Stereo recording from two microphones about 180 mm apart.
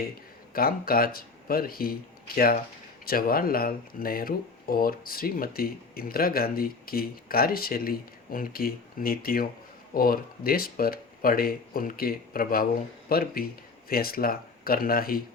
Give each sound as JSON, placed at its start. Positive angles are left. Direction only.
{"t": 0.5, "sound": "speech", "side_deg": 55}